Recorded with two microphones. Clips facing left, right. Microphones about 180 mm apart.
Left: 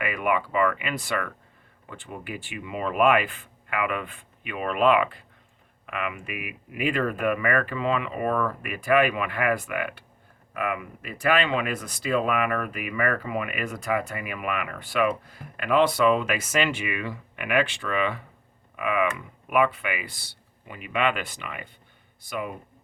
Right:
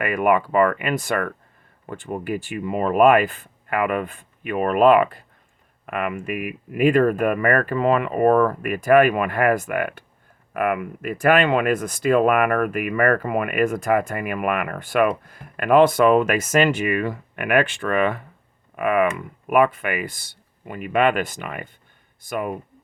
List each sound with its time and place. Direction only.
0.0 s speech: 50° right (ahead or behind)